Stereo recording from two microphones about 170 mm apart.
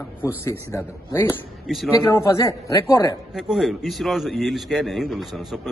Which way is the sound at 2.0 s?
15° left (ahead or behind).